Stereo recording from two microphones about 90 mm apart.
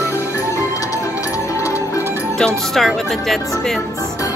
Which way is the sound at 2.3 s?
5° left (ahead or behind).